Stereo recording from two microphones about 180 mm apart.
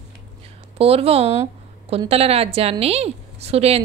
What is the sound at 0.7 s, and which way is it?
A woman's voice, 35° right (ahead or behind).